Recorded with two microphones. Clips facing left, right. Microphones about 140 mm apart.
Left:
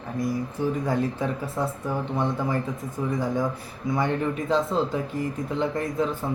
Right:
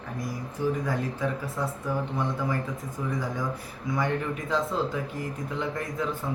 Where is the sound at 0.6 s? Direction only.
30° left (ahead or behind).